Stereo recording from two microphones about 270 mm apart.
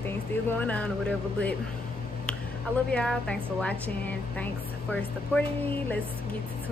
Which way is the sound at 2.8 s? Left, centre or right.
Centre.